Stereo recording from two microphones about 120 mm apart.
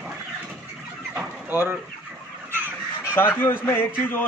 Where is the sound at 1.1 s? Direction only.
20° right (ahead or behind).